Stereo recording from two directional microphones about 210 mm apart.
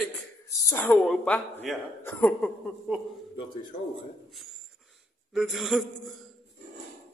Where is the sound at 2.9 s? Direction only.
5° right (ahead or behind).